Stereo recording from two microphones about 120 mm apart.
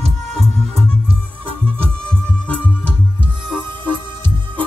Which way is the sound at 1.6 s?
10° left (ahead or behind).